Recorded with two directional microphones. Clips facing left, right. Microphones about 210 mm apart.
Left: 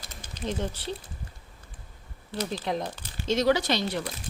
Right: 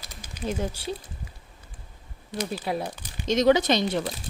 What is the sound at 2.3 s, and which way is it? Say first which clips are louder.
Speech: right 1 dB; 15° right (ahead or behind).